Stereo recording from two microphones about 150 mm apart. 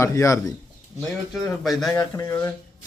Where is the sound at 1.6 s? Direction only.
Centre (ahead or behind).